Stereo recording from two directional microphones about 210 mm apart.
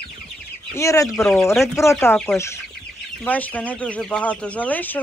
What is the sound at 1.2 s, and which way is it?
Speech, centre (ahead or behind).